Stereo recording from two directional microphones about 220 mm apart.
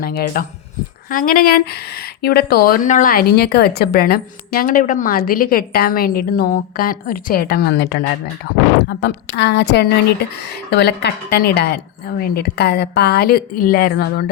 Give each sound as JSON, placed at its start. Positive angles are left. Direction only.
{"t": 0.0, "sound": "speech", "side_deg": 45}